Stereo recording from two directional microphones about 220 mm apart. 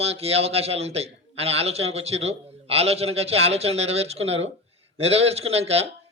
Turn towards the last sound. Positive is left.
turn(degrees=-30)  # may be behind; listen again after turning